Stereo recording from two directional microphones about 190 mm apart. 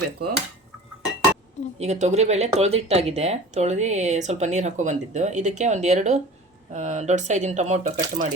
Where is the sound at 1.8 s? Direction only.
35° right (ahead or behind).